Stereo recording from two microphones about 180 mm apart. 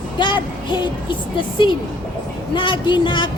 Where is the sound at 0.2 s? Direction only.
25° left (ahead or behind).